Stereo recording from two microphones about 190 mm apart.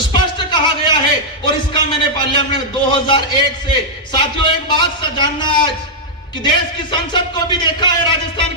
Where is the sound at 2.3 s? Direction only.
25° left (ahead or behind).